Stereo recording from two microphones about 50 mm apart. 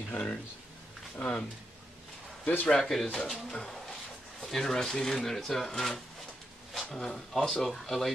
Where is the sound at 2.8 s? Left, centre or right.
Centre.